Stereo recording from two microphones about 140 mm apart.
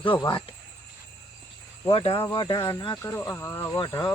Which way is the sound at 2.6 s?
20° left (ahead or behind).